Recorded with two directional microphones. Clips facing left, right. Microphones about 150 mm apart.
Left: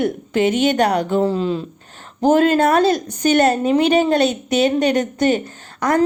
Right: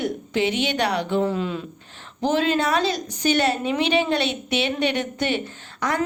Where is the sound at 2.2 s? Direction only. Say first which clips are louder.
Left 7 dB; 50° left (ahead or behind).